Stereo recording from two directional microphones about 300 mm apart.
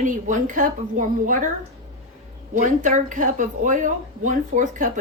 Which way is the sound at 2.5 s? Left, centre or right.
Right.